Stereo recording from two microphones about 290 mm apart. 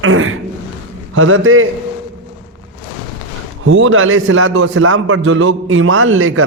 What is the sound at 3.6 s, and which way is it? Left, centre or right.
A man's voice, right.